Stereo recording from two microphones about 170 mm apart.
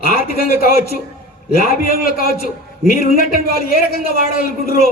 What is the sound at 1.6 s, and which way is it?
A man's voice, 60° left (ahead or behind).